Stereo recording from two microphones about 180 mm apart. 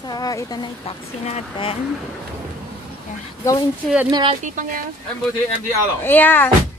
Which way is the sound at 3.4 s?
20° left (ahead or behind).